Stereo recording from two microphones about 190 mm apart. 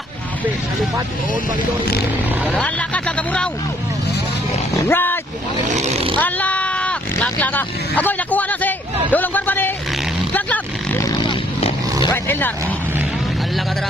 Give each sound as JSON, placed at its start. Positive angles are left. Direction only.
{"t": 2.5, "sound": "speech", "side_deg": 5}
{"t": 4.7, "sound": "speech", "side_deg": 10}
{"t": 5.7, "sound": "speech", "side_deg": -35}
{"t": 6.1, "sound": "speech", "side_deg": 10}
{"t": 11.1, "sound": "vehicle", "side_deg": 25}
{"t": 12.1, "sound": "speech", "side_deg": 10}